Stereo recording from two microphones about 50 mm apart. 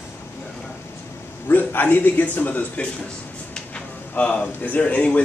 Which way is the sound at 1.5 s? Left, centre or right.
Left.